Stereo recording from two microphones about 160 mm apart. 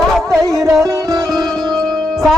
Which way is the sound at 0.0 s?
Centre (ahead or behind).